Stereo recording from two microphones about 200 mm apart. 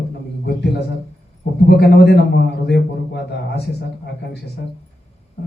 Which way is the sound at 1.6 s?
55° left (ahead or behind).